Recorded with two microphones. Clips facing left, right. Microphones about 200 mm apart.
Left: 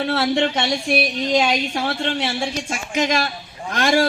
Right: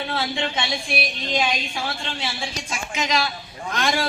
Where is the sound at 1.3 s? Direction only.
75° left (ahead or behind).